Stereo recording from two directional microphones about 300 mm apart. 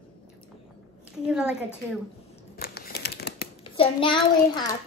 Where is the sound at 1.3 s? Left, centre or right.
Centre.